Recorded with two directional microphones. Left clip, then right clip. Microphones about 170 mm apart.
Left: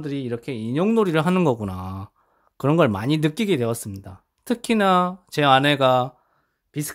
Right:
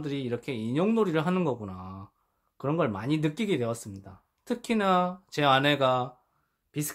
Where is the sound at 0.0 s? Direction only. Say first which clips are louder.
Left 4 dB; 35° left (ahead or behind).